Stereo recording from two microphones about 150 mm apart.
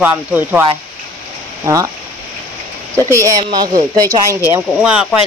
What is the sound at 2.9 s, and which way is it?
Speech, 20° right (ahead or behind).